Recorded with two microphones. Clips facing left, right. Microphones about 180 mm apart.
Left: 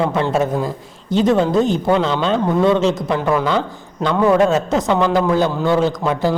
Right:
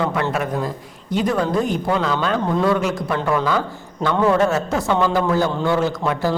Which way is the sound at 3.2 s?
10° left (ahead or behind).